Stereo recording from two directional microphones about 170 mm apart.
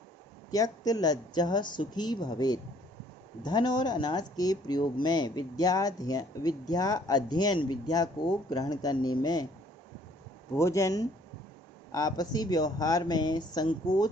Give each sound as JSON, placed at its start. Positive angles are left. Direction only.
{"t": 0.5, "sound": "speech", "side_deg": 20}
{"t": 10.5, "sound": "speech", "side_deg": 15}